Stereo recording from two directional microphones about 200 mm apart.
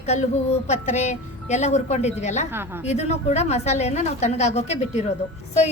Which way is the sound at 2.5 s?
10° right (ahead or behind).